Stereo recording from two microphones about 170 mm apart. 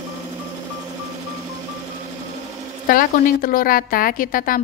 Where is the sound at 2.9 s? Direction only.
55° left (ahead or behind).